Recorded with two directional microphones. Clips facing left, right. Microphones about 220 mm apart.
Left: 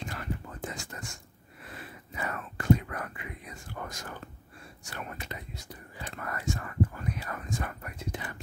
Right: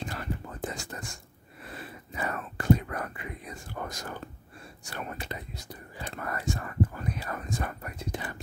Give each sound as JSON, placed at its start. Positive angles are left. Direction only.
{"t": 0.0, "sound": "whispering", "side_deg": -35}
{"t": 2.1, "sound": "whispering", "side_deg": -35}